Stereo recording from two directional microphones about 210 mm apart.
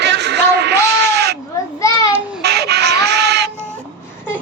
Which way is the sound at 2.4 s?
50° right (ahead or behind).